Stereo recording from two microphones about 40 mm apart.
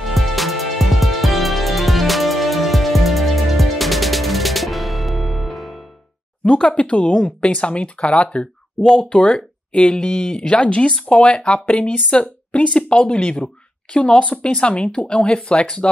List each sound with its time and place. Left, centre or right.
0.1 s music: centre
6.4 s a woman's voice: left